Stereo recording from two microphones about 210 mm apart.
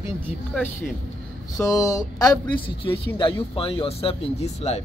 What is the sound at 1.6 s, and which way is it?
Speech, 15° left (ahead or behind).